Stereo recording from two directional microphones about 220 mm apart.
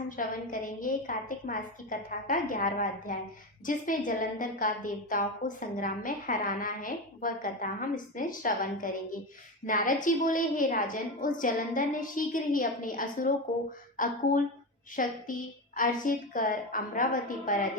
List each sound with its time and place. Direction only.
0.2 s a woman's voice: 40° left (ahead or behind)